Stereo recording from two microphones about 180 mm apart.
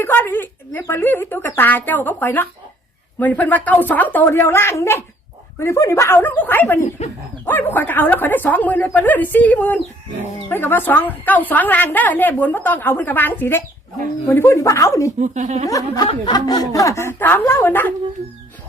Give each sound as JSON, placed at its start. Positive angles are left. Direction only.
{"t": 0.0, "sound": "a woman's voice", "side_deg": 10}
{"t": 15.2, "sound": "a woman's voice", "side_deg": -40}
{"t": 15.6, "sound": "a woman's voice", "side_deg": 20}